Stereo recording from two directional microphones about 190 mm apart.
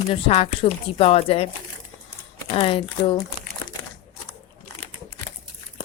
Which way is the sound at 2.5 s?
30° left (ahead or behind).